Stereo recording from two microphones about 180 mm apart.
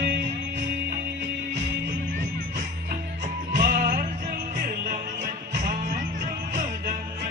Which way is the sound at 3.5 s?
45° right (ahead or behind).